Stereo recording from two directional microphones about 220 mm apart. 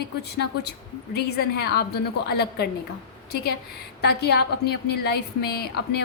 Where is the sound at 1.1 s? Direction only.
45° left (ahead or behind).